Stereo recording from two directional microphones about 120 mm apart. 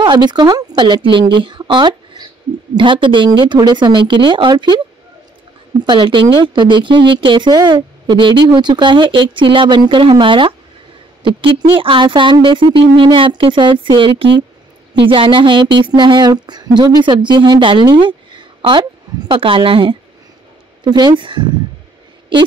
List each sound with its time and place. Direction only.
0.0 s speech: 40° right (ahead or behind)
5.9 s speech: 45° right (ahead or behind)